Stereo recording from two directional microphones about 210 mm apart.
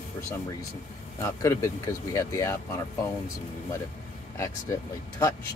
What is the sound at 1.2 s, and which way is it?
Speech, 15° left (ahead or behind).